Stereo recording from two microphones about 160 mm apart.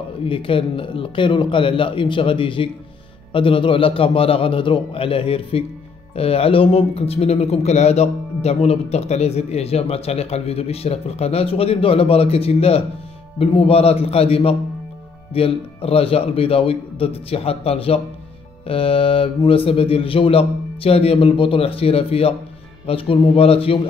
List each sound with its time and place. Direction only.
0.2 s speech: 35° left (ahead or behind)